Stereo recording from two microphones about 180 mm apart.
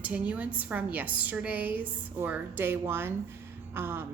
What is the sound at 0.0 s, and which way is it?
A woman's voice, 10° right (ahead or behind).